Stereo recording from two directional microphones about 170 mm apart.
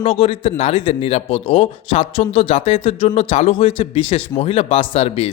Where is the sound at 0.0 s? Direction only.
35° left (ahead or behind).